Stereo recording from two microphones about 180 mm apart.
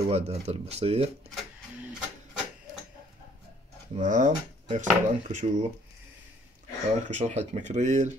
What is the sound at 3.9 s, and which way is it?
Speech, 40° right (ahead or behind).